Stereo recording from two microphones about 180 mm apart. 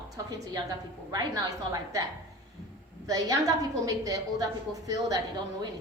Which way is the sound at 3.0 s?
20° right (ahead or behind).